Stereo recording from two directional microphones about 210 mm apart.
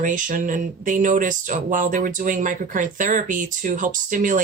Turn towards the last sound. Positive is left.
turn(degrees=-40)  # may be behind; listen again after turning